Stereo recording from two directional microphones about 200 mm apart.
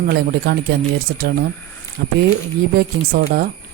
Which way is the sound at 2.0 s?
50° right (ahead or behind).